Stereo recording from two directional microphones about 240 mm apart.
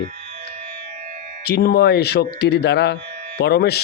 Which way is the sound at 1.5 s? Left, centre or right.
Left.